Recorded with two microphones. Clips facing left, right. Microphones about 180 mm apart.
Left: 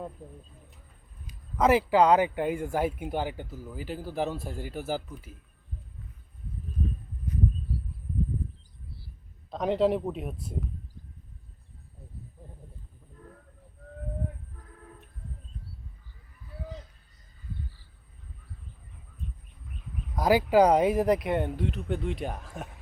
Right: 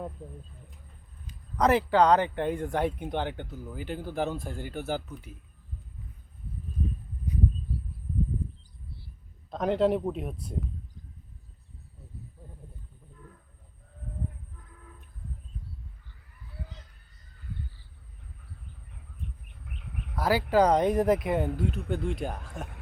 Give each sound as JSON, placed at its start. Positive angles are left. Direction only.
{"t": 1.3, "sound": "speech", "side_deg": 5}
{"t": 9.5, "sound": "speech", "side_deg": 0}
{"t": 19.5, "sound": "a sound", "side_deg": -70}
{"t": 20.1, "sound": "speech", "side_deg": 15}